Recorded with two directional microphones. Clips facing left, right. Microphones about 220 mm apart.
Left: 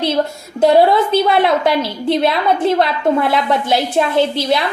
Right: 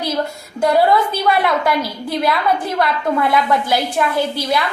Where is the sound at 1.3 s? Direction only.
25° left (ahead or behind).